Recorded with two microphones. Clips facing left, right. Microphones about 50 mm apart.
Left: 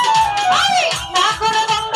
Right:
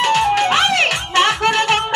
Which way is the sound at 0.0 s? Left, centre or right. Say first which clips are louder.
Left 1 dB; right.